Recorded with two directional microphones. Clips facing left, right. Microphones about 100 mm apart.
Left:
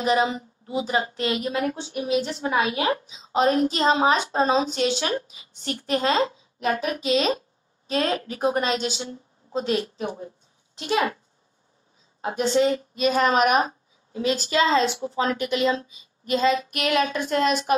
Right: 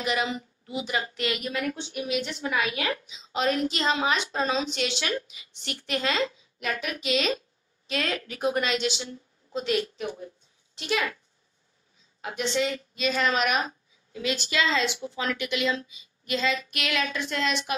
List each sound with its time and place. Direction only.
0.0 s a woman's voice: 35° left (ahead or behind)
12.2 s a woman's voice: 35° left (ahead or behind)